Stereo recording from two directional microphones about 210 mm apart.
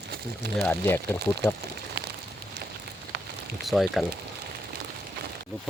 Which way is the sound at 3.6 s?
Centre (ahead or behind).